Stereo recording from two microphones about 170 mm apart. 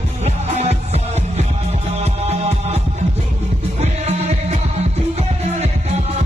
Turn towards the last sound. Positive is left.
turn(degrees=-40)  # may be behind; listen again after turning